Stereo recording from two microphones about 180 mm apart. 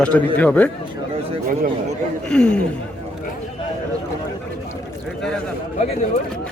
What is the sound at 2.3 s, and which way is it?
Speech, 5° left (ahead or behind).